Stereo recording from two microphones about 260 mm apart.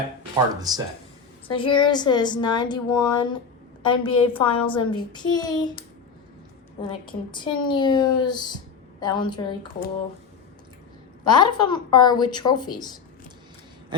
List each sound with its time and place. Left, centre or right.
0.7 s speech: centre
1.5 s a woman's voice: centre
6.8 s a woman's voice: centre
11.3 s a woman's voice: centre